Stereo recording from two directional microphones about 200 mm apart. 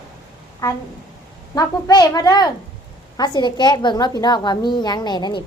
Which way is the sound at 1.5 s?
20° left (ahead or behind).